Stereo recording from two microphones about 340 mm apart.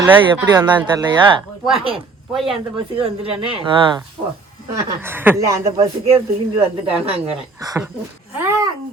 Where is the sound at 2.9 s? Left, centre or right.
Centre.